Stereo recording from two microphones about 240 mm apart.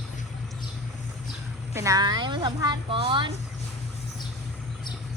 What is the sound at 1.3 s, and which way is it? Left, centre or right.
A woman's voice, centre.